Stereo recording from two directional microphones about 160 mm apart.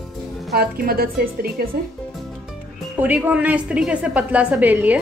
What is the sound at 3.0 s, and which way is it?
A woman's voice, 10° right (ahead or behind).